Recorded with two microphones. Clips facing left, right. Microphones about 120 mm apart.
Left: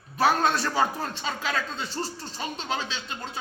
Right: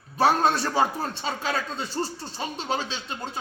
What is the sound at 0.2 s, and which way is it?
Speech, 30° right (ahead or behind).